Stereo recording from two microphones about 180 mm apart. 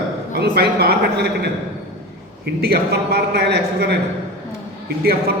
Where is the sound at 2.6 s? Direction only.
60° right (ahead or behind).